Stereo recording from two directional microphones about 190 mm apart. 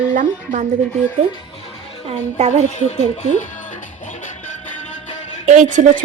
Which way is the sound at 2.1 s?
35° right (ahead or behind).